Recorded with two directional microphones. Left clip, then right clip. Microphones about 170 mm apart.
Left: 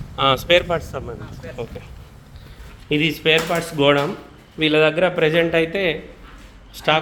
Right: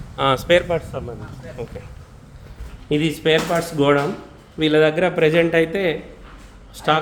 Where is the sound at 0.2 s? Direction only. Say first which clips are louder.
Left 1 dB; 15° right (ahead or behind).